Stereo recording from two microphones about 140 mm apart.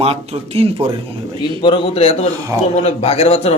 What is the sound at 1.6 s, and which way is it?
Speech, 35° left (ahead or behind).